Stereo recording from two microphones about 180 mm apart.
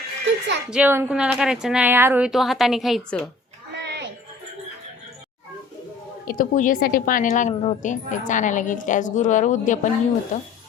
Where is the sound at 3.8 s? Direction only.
75° right (ahead or behind).